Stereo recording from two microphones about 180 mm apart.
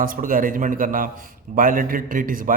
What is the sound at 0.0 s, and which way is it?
A man's voice, 50° right (ahead or behind).